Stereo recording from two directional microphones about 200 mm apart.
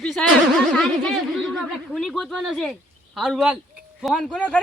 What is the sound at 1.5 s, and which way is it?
Speech, centre (ahead or behind).